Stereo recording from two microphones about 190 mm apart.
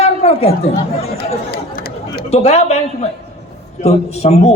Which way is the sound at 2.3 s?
35° left (ahead or behind).